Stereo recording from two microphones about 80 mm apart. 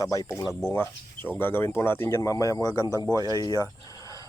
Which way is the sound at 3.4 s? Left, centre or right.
Left.